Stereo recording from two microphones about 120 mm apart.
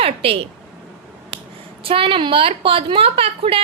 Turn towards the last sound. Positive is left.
turn(degrees=-50)  # may be behind; listen again after turning